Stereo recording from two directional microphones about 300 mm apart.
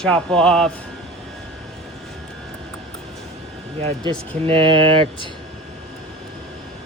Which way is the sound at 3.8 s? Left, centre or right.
Centre.